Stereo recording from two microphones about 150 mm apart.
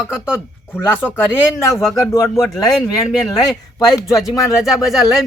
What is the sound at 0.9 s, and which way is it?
Speech, 15° left (ahead or behind).